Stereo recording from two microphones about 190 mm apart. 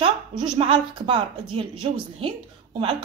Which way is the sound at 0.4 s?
25° right (ahead or behind).